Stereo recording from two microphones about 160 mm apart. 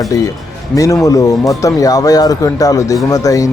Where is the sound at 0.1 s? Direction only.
20° left (ahead or behind).